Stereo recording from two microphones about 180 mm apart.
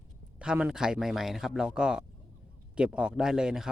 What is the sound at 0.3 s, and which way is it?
Speech, 5° right (ahead or behind).